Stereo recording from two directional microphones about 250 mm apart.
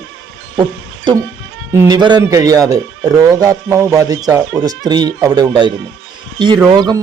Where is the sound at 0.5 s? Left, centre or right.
Centre.